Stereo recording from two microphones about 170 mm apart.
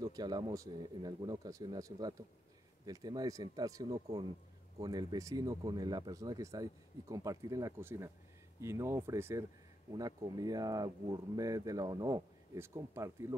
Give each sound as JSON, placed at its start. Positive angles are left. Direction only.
{"t": 0.0, "sound": "speech", "side_deg": -25}